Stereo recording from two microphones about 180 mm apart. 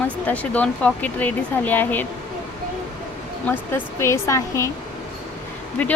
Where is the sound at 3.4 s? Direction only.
10° left (ahead or behind).